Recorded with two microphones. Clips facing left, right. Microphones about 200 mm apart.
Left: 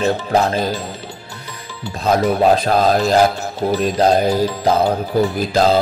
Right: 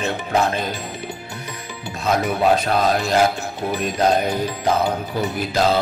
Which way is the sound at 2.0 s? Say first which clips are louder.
Left 4 dB; 35° left (ahead or behind).